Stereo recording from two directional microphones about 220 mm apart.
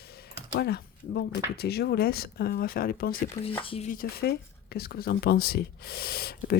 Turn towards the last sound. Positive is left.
turn(degrees=45)  # may be behind; listen again after turning